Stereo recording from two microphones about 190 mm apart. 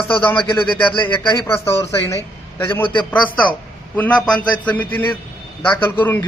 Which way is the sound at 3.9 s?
10° left (ahead or behind).